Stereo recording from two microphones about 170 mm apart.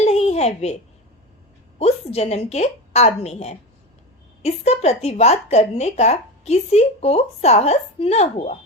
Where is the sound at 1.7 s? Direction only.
40° left (ahead or behind).